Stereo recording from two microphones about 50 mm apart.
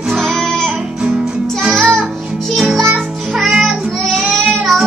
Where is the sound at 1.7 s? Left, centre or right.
Centre.